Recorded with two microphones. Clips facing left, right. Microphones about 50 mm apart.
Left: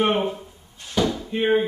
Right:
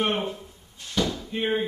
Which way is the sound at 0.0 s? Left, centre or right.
Centre.